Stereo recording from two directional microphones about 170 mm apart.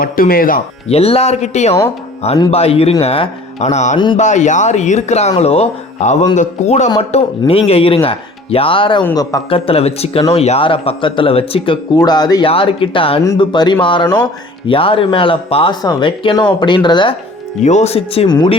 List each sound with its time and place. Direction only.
0.0 s speech: 60° left (ahead or behind)
0.9 s speech: 35° left (ahead or behind)
3.9 s speech: 30° left (ahead or behind)
4.2 s speech: 45° left (ahead or behind); by 17.2 s 25° left (ahead or behind)
17.6 s speech: 45° left (ahead or behind)